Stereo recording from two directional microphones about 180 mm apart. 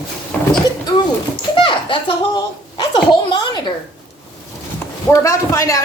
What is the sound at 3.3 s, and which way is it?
Speech, 25° left (ahead or behind).